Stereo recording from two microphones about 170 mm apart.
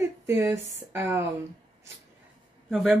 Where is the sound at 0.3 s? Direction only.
15° right (ahead or behind).